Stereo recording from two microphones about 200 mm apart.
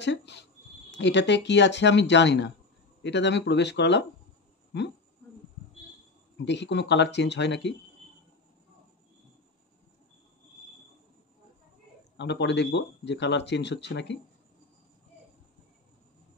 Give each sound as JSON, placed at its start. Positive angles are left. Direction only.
{"t": 0.0, "sound": "speech", "side_deg": 60}
{"t": 6.3, "sound": "speech", "side_deg": 60}
{"t": 12.2, "sound": "speech", "side_deg": 60}